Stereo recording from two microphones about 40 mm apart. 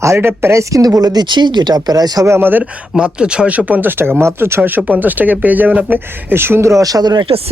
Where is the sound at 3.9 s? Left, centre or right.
Right.